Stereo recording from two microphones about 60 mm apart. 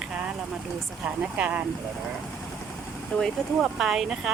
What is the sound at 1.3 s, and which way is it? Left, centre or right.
Speech, right.